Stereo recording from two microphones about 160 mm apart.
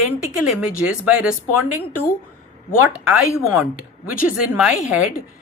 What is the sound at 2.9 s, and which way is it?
Speech, 5° right (ahead or behind).